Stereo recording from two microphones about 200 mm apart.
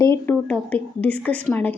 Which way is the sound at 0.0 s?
15° left (ahead or behind).